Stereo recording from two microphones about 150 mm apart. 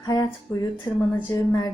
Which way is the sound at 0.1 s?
25° left (ahead or behind).